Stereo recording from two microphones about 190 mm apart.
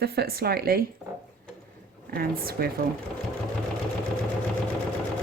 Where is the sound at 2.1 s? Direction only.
55° right (ahead or behind).